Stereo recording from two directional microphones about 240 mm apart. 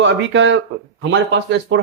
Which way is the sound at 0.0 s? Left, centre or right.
Right.